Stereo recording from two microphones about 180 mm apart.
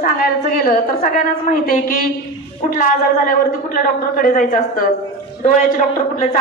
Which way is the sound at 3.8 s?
50° left (ahead or behind).